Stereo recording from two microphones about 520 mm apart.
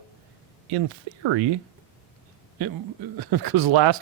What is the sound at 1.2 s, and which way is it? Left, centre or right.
Speech, right.